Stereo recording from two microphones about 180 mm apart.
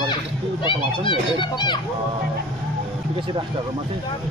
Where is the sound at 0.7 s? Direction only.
25° left (ahead or behind).